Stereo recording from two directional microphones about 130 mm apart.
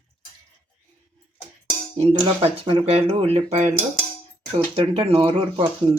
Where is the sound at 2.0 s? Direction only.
50° right (ahead or behind).